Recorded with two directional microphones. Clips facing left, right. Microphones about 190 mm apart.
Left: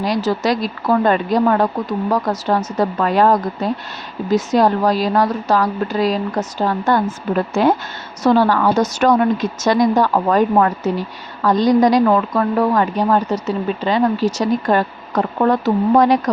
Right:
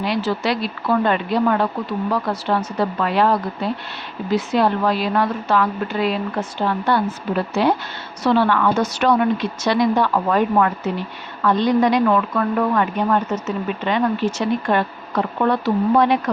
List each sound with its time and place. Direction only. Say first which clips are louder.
0.0 s a woman's voice: left 3 dB; 40° left (ahead or behind)